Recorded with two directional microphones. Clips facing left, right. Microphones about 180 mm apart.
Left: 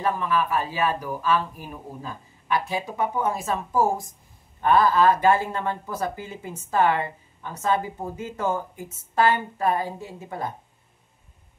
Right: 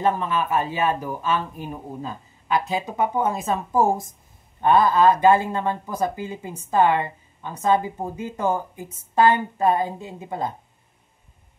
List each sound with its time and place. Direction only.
0.0 s speech: 25° right (ahead or behind)